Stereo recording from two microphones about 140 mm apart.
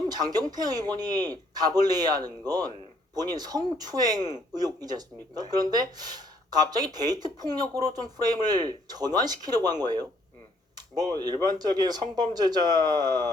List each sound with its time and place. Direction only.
0.1 s speech: 30° right (ahead or behind)
10.8 s a sound: 25° right (ahead or behind)
11.2 s speech: 30° right (ahead or behind)